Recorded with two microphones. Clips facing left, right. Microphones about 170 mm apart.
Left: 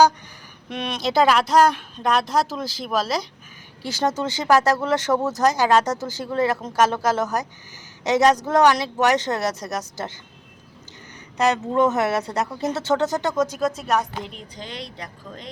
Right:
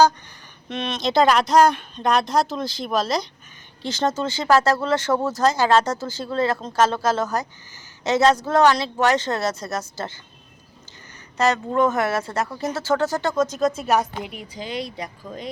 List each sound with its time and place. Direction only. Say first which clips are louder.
0.7 s a woman's voice: right 1 dB; 10° left (ahead or behind)
11.3 s a woman's voice: even; 15° left (ahead or behind); by 15.4 s 10° right (ahead or behind)